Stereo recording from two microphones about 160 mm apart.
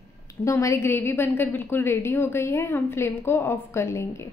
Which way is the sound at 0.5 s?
20° left (ahead or behind).